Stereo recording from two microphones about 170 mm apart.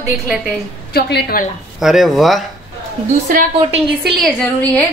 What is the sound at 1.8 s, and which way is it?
Speech, centre (ahead or behind).